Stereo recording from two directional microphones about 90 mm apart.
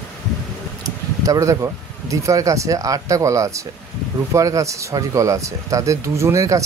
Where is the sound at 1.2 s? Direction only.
35° right (ahead or behind).